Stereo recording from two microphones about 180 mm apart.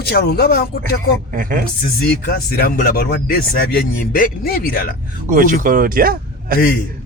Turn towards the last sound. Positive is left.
turn(degrees=50)  # may be behind; listen again after turning